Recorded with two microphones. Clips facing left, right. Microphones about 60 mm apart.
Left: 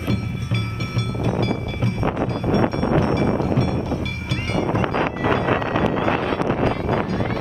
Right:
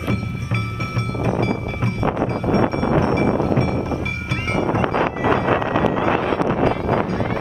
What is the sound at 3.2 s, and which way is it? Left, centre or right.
Music, right.